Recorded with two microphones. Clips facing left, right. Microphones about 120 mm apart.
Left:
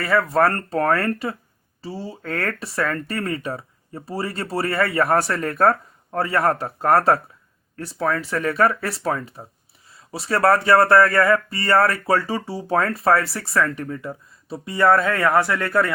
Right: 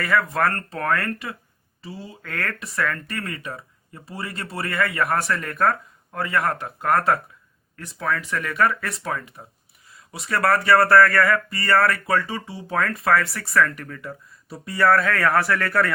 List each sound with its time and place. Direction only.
0.0 s speech: 30° left (ahead or behind)